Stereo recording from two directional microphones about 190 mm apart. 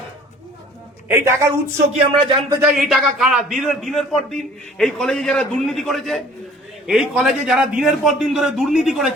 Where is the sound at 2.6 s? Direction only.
5° right (ahead or behind).